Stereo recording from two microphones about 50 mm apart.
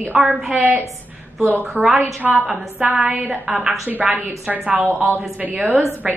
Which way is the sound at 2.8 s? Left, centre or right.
Right.